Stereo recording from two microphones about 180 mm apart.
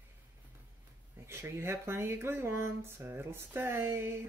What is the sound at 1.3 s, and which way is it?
Speech, 15° right (ahead or behind).